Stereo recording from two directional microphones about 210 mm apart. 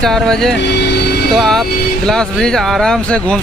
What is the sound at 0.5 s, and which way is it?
Speech, 55° left (ahead or behind).